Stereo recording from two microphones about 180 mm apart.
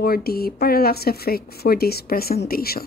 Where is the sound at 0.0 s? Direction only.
55° left (ahead or behind).